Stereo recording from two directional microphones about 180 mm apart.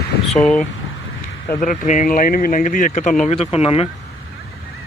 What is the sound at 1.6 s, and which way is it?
Speech, 45° left (ahead or behind).